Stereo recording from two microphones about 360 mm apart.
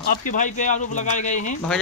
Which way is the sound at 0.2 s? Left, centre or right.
Left.